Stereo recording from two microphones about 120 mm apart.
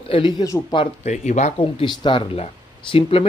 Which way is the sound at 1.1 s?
85° left.